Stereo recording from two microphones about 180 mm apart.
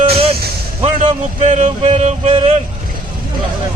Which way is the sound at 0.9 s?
40° right (ahead or behind).